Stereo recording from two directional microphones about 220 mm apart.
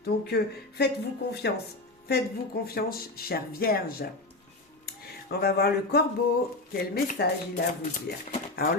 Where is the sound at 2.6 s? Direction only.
45° left (ahead or behind).